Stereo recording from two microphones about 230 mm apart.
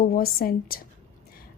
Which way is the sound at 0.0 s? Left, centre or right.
Left.